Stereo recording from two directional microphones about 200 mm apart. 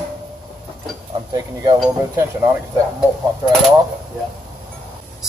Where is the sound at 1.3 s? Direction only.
20° right (ahead or behind).